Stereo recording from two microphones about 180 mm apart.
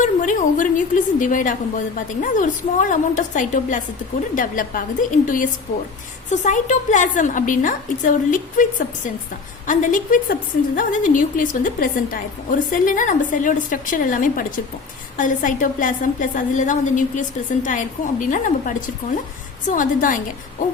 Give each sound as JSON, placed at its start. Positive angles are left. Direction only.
{"t": 0.0, "sound": "a woman's voice", "side_deg": 45}
{"t": 9.6, "sound": "a woman's voice", "side_deg": 45}